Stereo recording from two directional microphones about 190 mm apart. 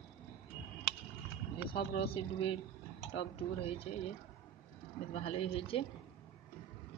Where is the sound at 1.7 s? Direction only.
30° left (ahead or behind).